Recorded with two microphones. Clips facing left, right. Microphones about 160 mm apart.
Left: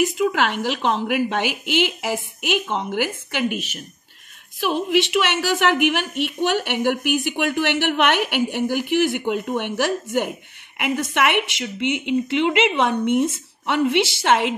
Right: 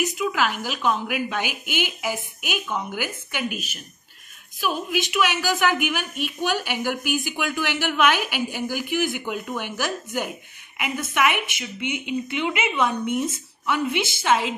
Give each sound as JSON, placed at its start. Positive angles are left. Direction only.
{"t": 0.2, "sound": "a woman's voice", "side_deg": 65}
{"t": 4.8, "sound": "a woman's voice", "side_deg": 75}
{"t": 13.7, "sound": "a woman's voice", "side_deg": 70}